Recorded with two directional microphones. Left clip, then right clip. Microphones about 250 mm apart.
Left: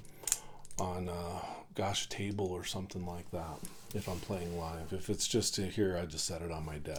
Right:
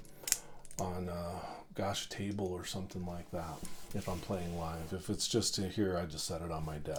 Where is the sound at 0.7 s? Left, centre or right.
Left.